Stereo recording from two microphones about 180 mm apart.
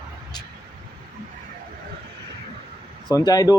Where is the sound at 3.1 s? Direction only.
20° left (ahead or behind).